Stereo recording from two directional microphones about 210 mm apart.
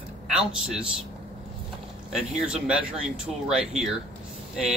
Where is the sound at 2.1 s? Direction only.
Centre (ahead or behind).